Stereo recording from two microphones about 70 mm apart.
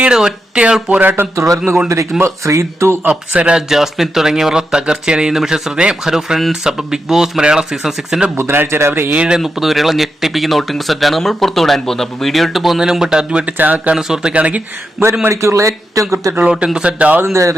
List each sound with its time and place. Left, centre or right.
0.0 s speech: centre
1.1 s speech: right
3.1 s speech: centre
3.7 s speech: centre
8.4 s speech: right
9.1 s speech: centre
9.4 s speech: centre
13.4 s speech: right
13.9 s speech: centre
15.3 s speech: right
16.5 s speech: centre